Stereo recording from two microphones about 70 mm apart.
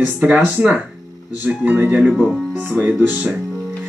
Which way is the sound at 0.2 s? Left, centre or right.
Centre.